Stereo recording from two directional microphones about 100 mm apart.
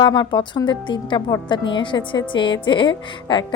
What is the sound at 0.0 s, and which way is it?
A woman's voice, 45° left (ahead or behind).